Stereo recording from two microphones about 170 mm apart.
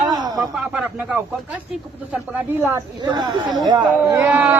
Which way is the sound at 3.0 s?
25° right (ahead or behind).